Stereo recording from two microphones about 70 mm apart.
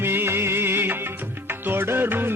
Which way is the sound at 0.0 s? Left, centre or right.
Right.